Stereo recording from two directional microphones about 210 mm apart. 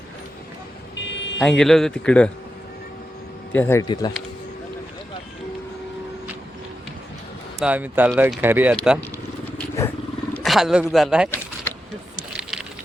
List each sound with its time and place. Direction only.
0.9 s vehicle: 60° left (ahead or behind)
1.4 s speech: 5° left (ahead or behind)
3.5 s speech: 10° left (ahead or behind)
7.6 s speech: 5° right (ahead or behind)
10.3 s speech: centre (ahead or behind)
12.4 s a sound: 5° right (ahead or behind)